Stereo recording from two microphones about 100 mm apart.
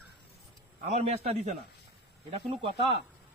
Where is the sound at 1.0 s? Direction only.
90° right.